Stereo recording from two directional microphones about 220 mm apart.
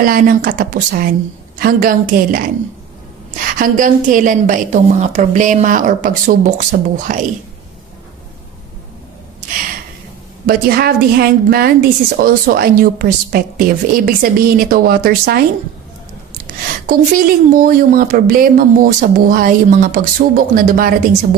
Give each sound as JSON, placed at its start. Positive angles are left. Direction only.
{"t": 0.0, "sound": "a woman's voice", "side_deg": -40}
{"t": 10.4, "sound": "a woman's voice", "side_deg": -45}
{"t": 16.8, "sound": "a woman's voice", "side_deg": -40}